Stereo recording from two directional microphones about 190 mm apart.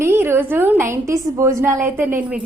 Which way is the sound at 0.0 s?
10° right (ahead or behind).